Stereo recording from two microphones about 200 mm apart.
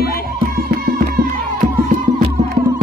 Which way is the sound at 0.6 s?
50° right (ahead or behind).